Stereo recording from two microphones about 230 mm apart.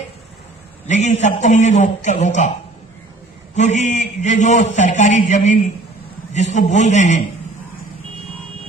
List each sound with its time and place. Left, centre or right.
0.9 s a man's voice: left
3.5 s a man's voice: left